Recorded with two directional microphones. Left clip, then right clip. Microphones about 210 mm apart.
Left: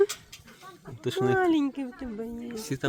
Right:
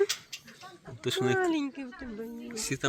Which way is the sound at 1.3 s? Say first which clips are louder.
Left 4 dB; 55° left (ahead or behind).